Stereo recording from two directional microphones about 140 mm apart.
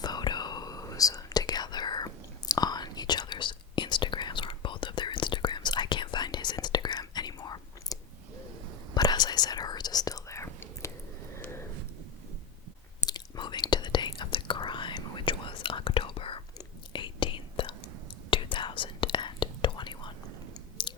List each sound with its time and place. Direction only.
0.0 s whispering: 30° left (ahead or behind)
9.0 s whispering: 30° left (ahead or behind)
11.3 s a sound: 20° left (ahead or behind)
13.0 s whispering: 30° left (ahead or behind)
20.8 s chewing: 35° left (ahead or behind)